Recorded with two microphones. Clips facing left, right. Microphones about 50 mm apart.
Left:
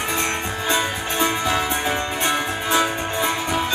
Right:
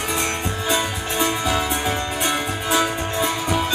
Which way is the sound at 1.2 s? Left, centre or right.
Centre.